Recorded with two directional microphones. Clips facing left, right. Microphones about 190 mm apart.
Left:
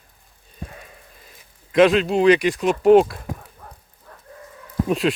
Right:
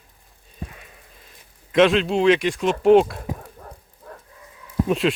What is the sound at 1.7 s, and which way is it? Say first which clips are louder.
Speech: left 1 dB; centre (ahead or behind).